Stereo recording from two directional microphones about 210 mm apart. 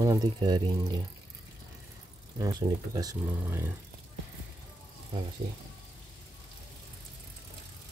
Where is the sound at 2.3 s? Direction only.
15° right (ahead or behind).